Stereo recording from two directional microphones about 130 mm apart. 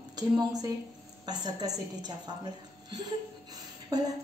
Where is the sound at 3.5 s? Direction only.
30° right (ahead or behind).